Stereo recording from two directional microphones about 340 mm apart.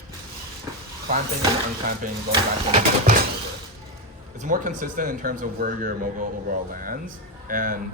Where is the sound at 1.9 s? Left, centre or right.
Right.